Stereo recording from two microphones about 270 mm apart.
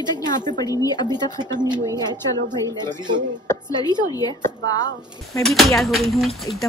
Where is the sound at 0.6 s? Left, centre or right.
Centre.